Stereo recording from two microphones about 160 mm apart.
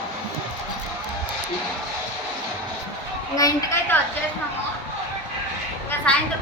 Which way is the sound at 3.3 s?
20° left (ahead or behind).